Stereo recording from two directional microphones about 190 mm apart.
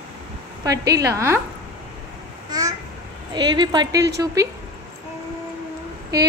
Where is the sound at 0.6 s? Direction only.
20° right (ahead or behind).